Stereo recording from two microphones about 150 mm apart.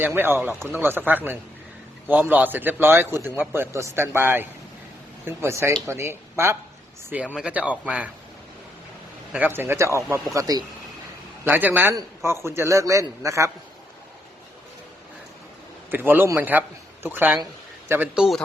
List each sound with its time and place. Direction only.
0.0 s a man's voice: 15° right (ahead or behind)
9.3 s a man's voice: 10° right (ahead or behind)
11.4 s a man's voice: 10° right (ahead or behind)
15.9 s a man's voice: 15° right (ahead or behind)